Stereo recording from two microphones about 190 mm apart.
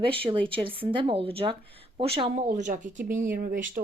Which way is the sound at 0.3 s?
25° right (ahead or behind).